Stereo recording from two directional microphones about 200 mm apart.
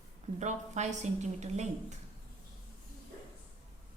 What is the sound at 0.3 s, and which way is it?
A woman's voice, 35° right (ahead or behind).